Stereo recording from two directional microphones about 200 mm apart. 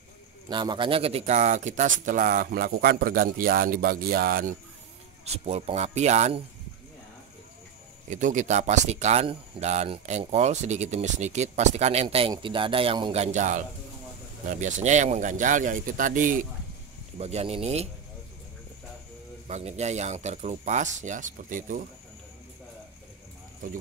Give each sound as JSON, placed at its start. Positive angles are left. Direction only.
{"t": 0.5, "sound": "speech", "side_deg": -25}
{"t": 5.2, "sound": "speech", "side_deg": -30}
{"t": 8.1, "sound": "speech", "side_deg": -40}
{"t": 19.4, "sound": "speech", "side_deg": -35}